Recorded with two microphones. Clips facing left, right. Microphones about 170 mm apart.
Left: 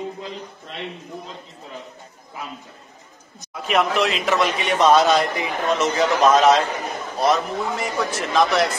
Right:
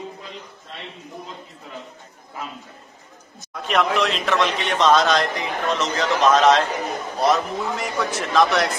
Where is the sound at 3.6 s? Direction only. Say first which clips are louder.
Left 1 dB; 5° left (ahead or behind).